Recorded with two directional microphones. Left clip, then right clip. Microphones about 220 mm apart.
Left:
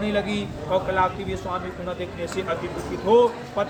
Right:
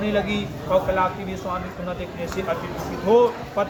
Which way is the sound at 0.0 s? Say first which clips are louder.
Right 2 dB; 25° left (ahead or behind).